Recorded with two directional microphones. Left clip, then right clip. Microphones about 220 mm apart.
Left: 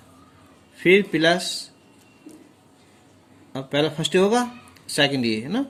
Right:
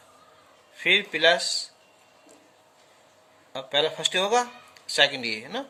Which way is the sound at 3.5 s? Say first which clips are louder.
Left 2 dB; 15° left (ahead or behind).